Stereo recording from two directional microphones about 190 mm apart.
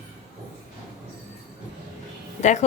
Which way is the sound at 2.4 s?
40° left (ahead or behind).